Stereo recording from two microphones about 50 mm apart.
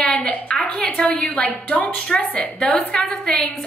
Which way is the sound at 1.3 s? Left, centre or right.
Left.